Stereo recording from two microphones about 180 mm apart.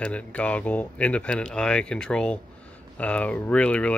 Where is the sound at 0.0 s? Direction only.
5° left (ahead or behind).